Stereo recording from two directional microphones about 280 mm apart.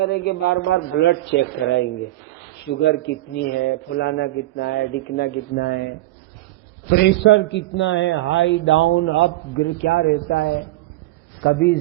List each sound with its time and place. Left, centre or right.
0.0 s a man's voice: left
2.8 s a man's voice: left
6.9 s a man's voice: left